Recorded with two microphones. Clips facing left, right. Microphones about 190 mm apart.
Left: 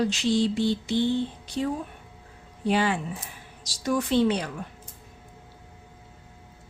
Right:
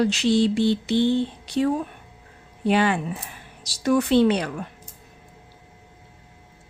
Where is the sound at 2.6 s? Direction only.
60° right (ahead or behind).